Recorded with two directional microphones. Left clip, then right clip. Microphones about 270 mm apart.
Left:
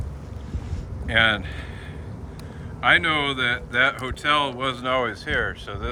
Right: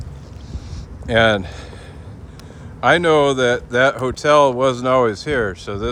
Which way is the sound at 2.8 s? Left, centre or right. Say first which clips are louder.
Right 6 dB; centre.